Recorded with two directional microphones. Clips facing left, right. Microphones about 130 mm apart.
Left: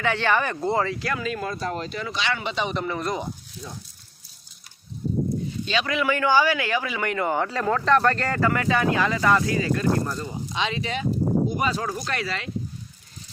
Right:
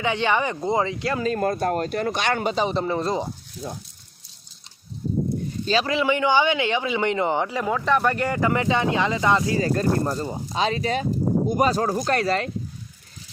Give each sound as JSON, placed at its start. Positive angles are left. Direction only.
{"t": 0.0, "sound": "a man's voice", "side_deg": -20}
{"t": 1.2, "sound": "speech", "side_deg": -45}
{"t": 5.6, "sound": "a man's voice", "side_deg": -35}
{"t": 9.6, "sound": "speech", "side_deg": -40}